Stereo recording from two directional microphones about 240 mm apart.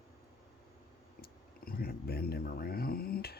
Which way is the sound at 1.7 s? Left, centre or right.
Left.